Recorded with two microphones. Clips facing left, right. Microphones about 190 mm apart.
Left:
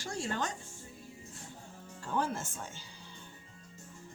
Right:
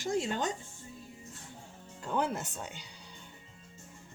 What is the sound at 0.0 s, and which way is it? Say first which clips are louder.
Speech: right 4 dB; 20° right (ahead or behind).